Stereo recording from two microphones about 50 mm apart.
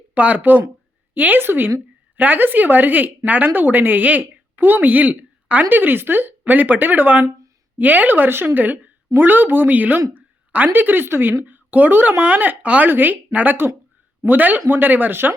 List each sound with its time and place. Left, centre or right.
0.1 s a woman's voice: right
2.1 s a woman's voice: right
11.4 s a woman's voice: right